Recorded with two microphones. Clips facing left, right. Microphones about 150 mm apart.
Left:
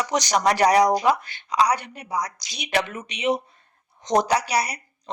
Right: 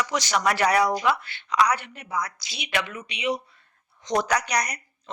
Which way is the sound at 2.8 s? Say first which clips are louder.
Left 3 dB; 50° left (ahead or behind).